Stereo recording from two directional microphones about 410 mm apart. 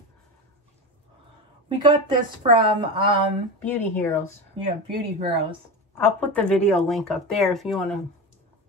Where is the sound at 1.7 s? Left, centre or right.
Centre.